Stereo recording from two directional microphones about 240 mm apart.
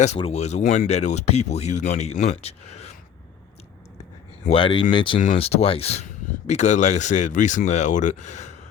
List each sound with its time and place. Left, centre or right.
0.0 s speech: left
4.4 s speech: left